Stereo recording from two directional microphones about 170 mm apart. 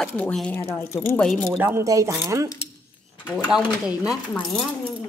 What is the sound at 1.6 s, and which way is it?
Speech, 15° right (ahead or behind).